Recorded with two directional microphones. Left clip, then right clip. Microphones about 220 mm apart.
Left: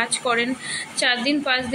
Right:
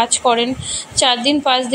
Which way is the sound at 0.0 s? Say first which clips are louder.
Right 7 dB; 15° right (ahead or behind).